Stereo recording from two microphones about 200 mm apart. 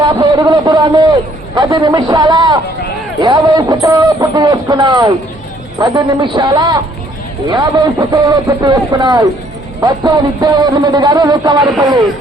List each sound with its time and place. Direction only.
0.0 s a man's voice: 20° right (ahead or behind)